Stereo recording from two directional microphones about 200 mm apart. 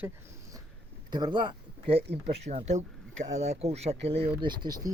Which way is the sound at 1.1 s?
20° right (ahead or behind).